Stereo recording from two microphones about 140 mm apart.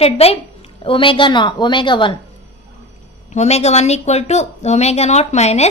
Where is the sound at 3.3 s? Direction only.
50° left (ahead or behind).